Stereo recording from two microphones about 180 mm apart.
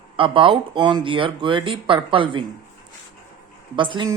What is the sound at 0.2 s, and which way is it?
Speech, 30° right (ahead or behind).